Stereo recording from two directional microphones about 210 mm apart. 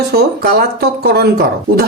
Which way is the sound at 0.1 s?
50° right (ahead or behind).